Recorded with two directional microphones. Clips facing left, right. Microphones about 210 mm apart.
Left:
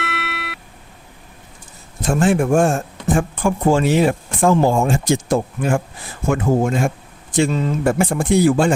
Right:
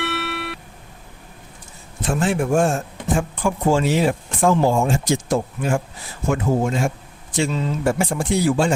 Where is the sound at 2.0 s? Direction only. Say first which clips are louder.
Left 4 dB; 45° left (ahead or behind).